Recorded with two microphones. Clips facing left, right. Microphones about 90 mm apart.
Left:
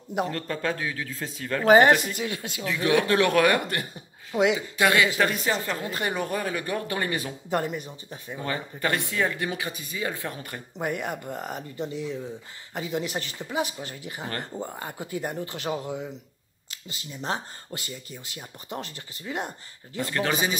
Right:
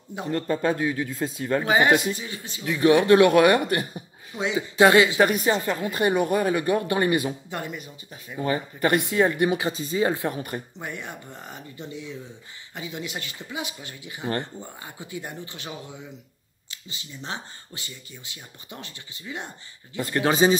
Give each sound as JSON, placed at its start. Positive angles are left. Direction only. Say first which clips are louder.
{"t": 0.3, "sound": "speech", "louder": "right 5 dB", "side_deg": -20}
{"t": 2.1, "sound": "speech", "louder": "left 5 dB", "side_deg": 75}
{"t": 2.6, "sound": "speech", "louder": "right 5 dB", "side_deg": -15}
{"t": 4.3, "sound": "speech", "louder": "left 6 dB", "side_deg": 70}
{"t": 4.6, "sound": "speech", "louder": "right 6 dB", "side_deg": -25}
{"t": 7.4, "sound": "speech", "louder": "left 5 dB", "side_deg": 45}
{"t": 8.4, "sound": "speech", "louder": "right 6 dB", "side_deg": -20}
{"t": 10.8, "sound": "speech", "louder": "left 6 dB", "side_deg": 50}
{"t": 20.0, "sound": "speech", "louder": "right 5 dB", "side_deg": -20}